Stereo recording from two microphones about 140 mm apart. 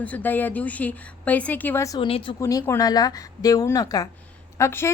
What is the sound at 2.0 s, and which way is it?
Speech, 40° left (ahead or behind).